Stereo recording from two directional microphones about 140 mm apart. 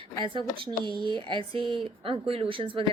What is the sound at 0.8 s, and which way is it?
Speech, 35° right (ahead or behind).